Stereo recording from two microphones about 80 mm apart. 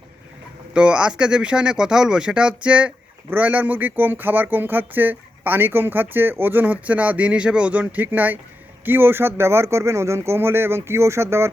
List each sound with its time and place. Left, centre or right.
0.7 s speech: centre; by 11.5 s right